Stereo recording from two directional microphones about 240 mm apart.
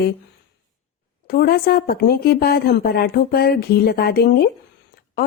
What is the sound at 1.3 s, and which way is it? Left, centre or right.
A woman's voice, left.